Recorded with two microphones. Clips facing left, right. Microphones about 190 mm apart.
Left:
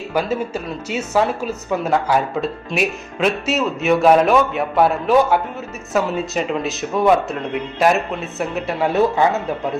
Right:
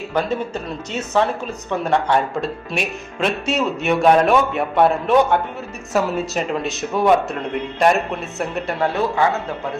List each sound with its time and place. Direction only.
0.1 s speech: 5° left (ahead or behind)
8.9 s a man's voice: 20° left (ahead or behind)